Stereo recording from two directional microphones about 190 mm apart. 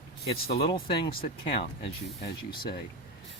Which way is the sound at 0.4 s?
55° left (ahead or behind).